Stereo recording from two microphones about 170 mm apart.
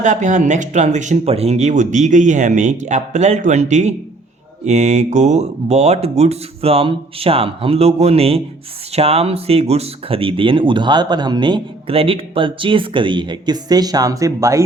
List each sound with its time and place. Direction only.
0.0 s speech: 45° right (ahead or behind); by 14.6 s 20° right (ahead or behind)